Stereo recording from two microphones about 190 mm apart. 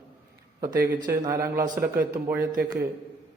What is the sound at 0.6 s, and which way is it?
A man's voice, 15° right (ahead or behind).